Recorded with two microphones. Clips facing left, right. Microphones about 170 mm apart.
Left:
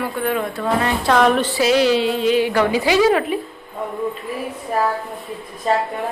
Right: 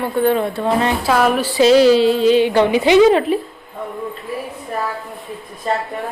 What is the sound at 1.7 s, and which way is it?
A woman's voice, 35° right (ahead or behind).